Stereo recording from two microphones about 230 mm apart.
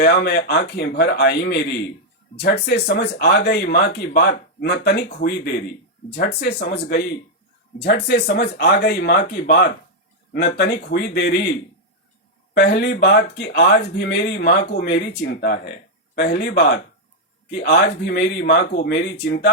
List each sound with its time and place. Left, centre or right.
0.0 s speech: left
12.5 s speech: left